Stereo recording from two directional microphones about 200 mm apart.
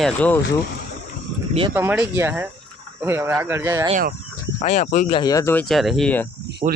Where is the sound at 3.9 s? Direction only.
40° right (ahead or behind).